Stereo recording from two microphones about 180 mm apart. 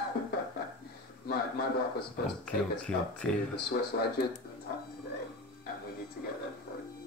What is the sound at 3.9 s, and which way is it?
Speech, 65° left (ahead or behind).